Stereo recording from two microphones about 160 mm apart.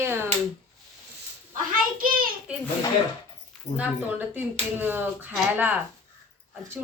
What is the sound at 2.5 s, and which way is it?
Speech, 5° right (ahead or behind).